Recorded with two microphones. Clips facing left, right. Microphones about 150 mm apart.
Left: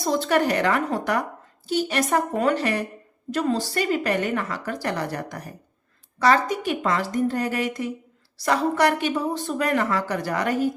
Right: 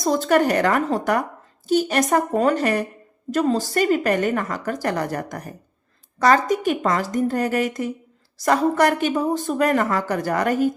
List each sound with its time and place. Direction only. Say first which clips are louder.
0.0 s a woman's voice: right 3 dB; 45° right (ahead or behind)